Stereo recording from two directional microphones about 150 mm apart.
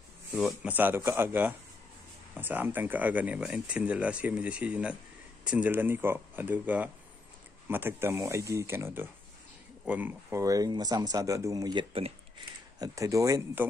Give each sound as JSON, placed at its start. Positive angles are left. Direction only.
{"t": 0.3, "sound": "speech", "side_deg": -5}